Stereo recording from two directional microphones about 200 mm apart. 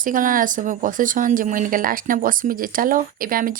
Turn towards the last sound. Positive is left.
turn(degrees=-45)  # may be behind; listen again after turning